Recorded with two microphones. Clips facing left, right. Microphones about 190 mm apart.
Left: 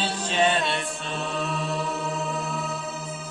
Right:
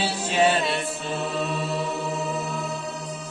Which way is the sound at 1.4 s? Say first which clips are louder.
Left 1 dB; centre (ahead or behind).